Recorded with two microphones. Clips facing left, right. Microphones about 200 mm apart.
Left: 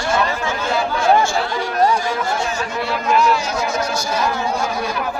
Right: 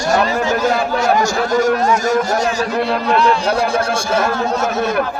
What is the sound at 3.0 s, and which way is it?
A man's voice, 35° right (ahead or behind).